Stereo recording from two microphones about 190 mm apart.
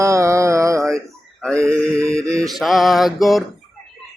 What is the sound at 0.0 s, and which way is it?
Mantra, 15° right (ahead or behind).